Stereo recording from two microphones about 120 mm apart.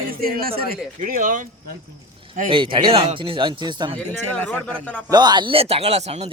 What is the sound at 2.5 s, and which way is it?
Speech, 45° right (ahead or behind).